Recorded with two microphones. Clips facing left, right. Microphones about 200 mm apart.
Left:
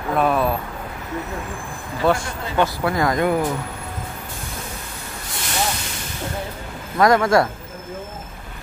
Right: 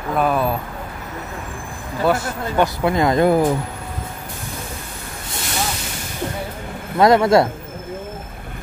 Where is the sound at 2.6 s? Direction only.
20° right (ahead or behind).